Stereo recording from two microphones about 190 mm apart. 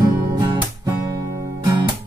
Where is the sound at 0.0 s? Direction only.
20° right (ahead or behind).